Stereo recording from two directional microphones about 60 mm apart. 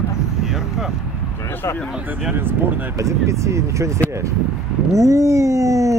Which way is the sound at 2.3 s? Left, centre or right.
Right.